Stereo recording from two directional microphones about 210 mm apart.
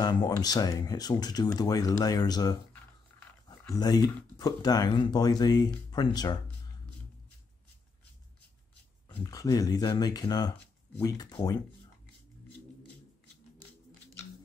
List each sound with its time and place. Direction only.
0.0 s speech: 20° left (ahead or behind)
9.1 s speech: 15° left (ahead or behind)